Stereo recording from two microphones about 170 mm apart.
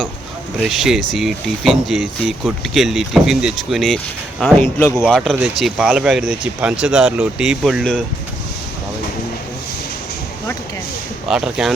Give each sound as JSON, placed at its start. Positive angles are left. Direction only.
{"t": 0.7, "sound": "speech", "side_deg": 0}
{"t": 4.8, "sound": "speech", "side_deg": 15}
{"t": 5.1, "sound": "speech", "side_deg": 0}
{"t": 11.3, "sound": "speech", "side_deg": -5}